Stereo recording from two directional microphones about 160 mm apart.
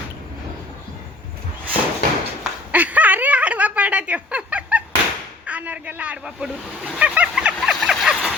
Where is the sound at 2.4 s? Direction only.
10° right (ahead or behind).